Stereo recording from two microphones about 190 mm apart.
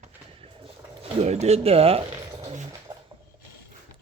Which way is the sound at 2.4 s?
35° right (ahead or behind).